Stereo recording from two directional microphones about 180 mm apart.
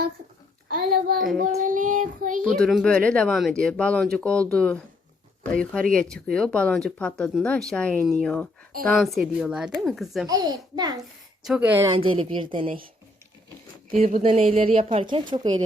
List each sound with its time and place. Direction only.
0.7 s a child's voice: 55° right (ahead or behind)
1.4 s child singing: 45° right (ahead or behind)
2.4 s speech: centre (ahead or behind)
10.2 s a woman's voice: 20° right (ahead or behind)
11.4 s speech: 5° right (ahead or behind)
11.7 s speech: 15° right (ahead or behind)
11.9 s a woman's voice: 30° right (ahead or behind)
14.2 s a woman's voice: 35° right (ahead or behind)